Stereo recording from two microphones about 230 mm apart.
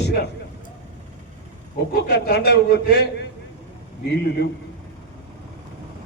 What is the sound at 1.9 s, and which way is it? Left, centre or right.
A man's voice, left.